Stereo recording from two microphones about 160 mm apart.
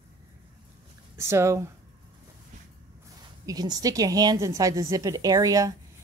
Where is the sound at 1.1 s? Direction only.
15° right (ahead or behind).